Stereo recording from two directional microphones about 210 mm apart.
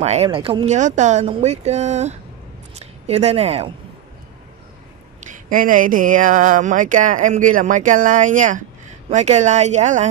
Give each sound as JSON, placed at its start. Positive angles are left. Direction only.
{"t": 0.0, "sound": "speech", "side_deg": -30}
{"t": 5.2, "sound": "speech", "side_deg": -40}